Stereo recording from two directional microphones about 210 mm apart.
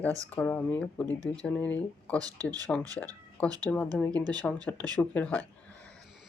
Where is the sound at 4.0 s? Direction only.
5° left (ahead or behind).